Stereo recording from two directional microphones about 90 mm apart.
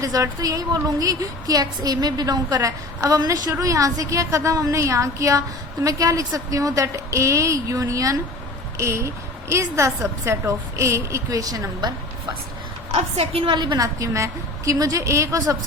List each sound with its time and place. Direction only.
0.0 s a woman's voice: 40° right (ahead or behind)
13.3 s a woman's voice: 65° right (ahead or behind)
13.8 s a woman's voice: 35° right (ahead or behind)